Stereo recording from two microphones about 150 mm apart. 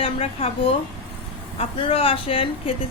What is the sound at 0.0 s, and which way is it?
Speech, 40° left (ahead or behind).